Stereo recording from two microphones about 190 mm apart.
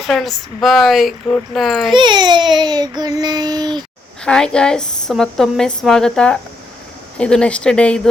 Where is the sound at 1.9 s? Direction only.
25° right (ahead or behind).